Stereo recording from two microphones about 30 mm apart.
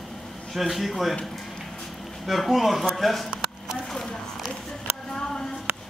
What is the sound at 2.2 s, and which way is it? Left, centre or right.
A man's voice, centre.